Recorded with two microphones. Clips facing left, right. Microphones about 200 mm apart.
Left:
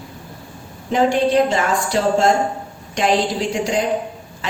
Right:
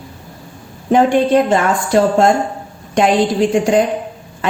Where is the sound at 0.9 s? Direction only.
50° right (ahead or behind).